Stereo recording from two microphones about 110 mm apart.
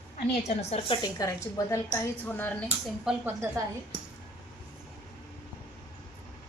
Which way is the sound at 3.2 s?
25° right (ahead or behind).